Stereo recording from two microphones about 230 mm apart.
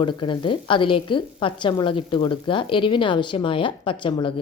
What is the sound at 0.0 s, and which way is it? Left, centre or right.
A woman's voice, left.